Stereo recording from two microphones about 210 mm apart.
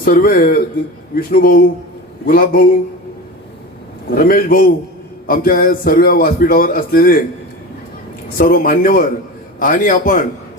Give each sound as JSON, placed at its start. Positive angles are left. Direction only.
{"t": 0.0, "sound": "a man's voice", "side_deg": 45}
{"t": 4.1, "sound": "a man's voice", "side_deg": 45}
{"t": 8.4, "sound": "a man's voice", "side_deg": 45}